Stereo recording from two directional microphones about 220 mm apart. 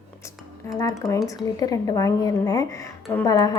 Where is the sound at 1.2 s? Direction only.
15° left (ahead or behind).